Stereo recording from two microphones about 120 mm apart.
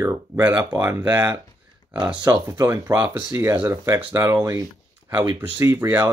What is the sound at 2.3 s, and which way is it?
Speech, 20° right (ahead or behind).